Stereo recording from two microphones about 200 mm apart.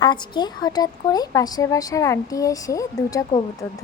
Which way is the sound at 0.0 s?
20° left (ahead or behind).